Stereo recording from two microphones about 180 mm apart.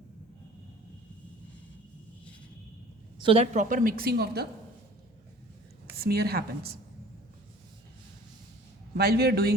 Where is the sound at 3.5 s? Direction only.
50° right (ahead or behind).